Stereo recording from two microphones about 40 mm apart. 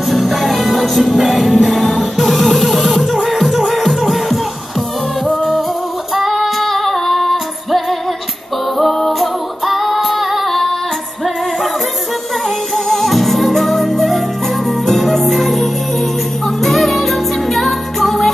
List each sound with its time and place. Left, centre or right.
0.0 s music: centre
5.2 s music: left
6.1 s female singing: centre
8.7 s music: centre
12.4 s music: centre